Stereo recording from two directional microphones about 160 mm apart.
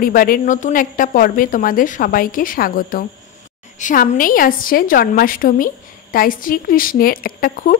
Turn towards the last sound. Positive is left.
turn(degrees=60)  # may be behind; listen again after turning